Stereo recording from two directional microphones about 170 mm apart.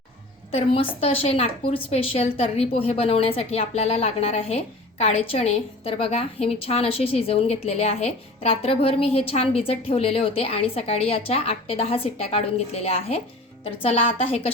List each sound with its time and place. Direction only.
0.5 s speech: 35° left (ahead or behind)